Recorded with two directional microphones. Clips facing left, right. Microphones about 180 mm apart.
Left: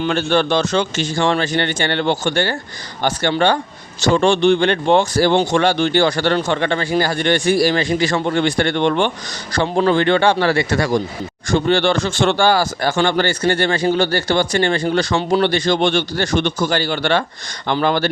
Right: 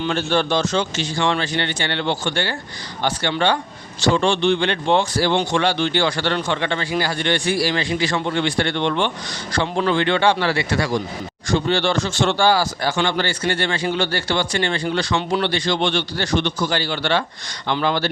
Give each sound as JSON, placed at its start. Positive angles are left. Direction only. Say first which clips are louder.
{"t": 0.0, "sound": "speech", "louder": "left 3 dB", "side_deg": 60}